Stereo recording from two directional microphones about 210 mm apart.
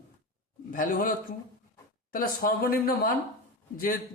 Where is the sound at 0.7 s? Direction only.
40° left (ahead or behind).